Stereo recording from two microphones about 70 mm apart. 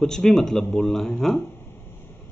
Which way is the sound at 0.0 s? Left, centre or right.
Centre.